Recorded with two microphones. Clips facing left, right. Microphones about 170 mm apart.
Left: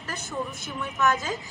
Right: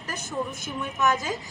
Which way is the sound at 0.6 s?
20° right (ahead or behind).